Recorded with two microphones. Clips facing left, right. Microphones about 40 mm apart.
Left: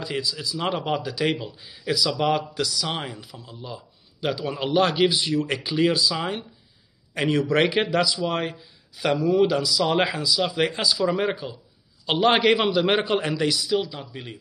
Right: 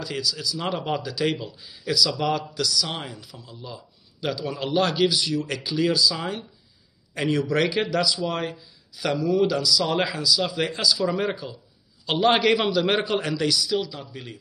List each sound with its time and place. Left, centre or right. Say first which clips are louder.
0.0 s a man's voice: even; left
0.6 s a man's voice: left 4 dB; centre
2.5 s a man's voice: even; left
11.0 s a man's voice: left 2 dB; centre